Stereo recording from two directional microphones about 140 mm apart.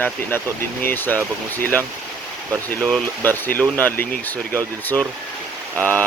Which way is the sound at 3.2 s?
15° left (ahead or behind).